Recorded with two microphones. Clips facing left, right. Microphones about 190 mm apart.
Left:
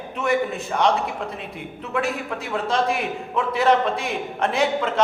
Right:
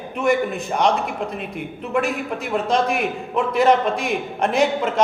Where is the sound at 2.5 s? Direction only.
15° right (ahead or behind).